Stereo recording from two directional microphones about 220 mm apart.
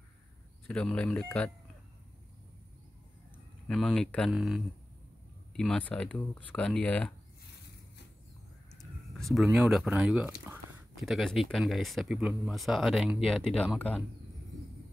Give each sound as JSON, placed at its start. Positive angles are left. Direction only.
{"t": 0.7, "sound": "speech", "side_deg": 5}
{"t": 3.6, "sound": "speech", "side_deg": 0}
{"t": 8.7, "sound": "speech", "side_deg": 0}